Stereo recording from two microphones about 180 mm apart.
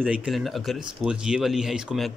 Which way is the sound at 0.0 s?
5° right (ahead or behind).